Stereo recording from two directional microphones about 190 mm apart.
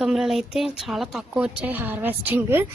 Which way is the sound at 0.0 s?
Centre (ahead or behind).